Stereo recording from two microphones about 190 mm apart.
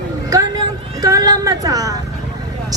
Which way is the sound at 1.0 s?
20° right (ahead or behind).